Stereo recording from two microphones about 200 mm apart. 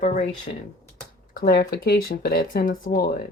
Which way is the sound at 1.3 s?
45° left (ahead or behind).